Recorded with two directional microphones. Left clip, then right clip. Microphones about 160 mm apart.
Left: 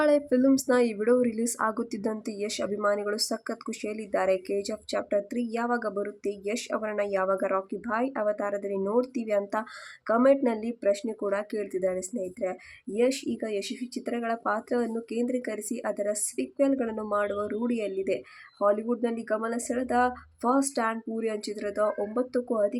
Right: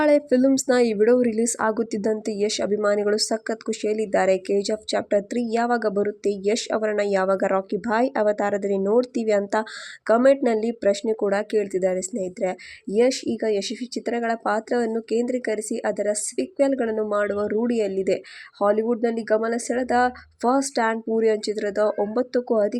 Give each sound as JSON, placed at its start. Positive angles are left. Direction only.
{"t": 0.0, "sound": "a woman's voice", "side_deg": -20}